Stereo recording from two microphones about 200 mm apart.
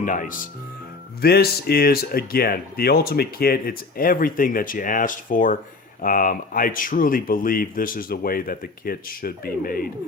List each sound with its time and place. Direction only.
0.0 s speech: 40° left (ahead or behind)